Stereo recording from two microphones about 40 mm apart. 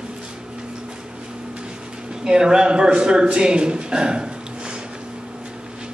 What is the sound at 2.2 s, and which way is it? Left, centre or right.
Speech, right.